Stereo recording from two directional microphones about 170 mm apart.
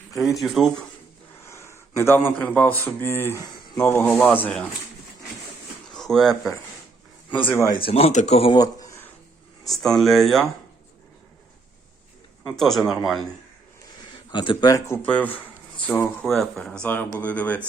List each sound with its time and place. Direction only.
0.4 s speech: centre (ahead or behind)
1.5 s a man's voice: 15° left (ahead or behind)
5.9 s speech: 5° left (ahead or behind)
7.7 s speech: 30° left (ahead or behind)
8.5 s a sound: 20° left (ahead or behind)
9.6 s speech: centre (ahead or behind)
12.5 s speech: centre (ahead or behind)
14.3 s speech: 30° left (ahead or behind); by 17.6 s 10° left (ahead or behind)